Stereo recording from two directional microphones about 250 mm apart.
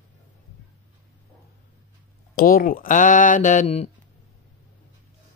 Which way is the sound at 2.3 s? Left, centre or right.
Left.